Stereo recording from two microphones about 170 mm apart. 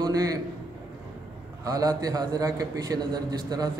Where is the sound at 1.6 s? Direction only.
20° right (ahead or behind).